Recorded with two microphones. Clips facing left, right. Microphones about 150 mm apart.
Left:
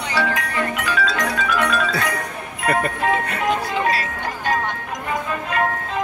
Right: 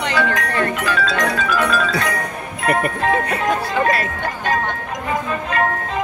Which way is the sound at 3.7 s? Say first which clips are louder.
Right 3 dB; 55° right (ahead or behind).